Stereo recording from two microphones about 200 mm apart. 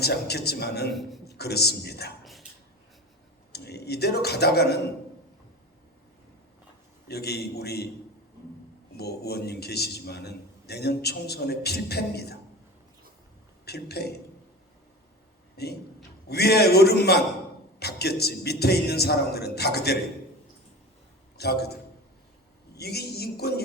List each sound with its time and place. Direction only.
0.0 s a man's voice: 55° left (ahead or behind)
3.5 s a man's voice: 55° left (ahead or behind)
7.1 s a man's voice: 55° left (ahead or behind)
9.0 s a man's voice: 55° left (ahead or behind)
13.7 s a man's voice: 55° left (ahead or behind)
15.5 s a man's voice: 55° left (ahead or behind)
21.3 s a man's voice: 55° left (ahead or behind)
22.8 s a man's voice: 55° left (ahead or behind)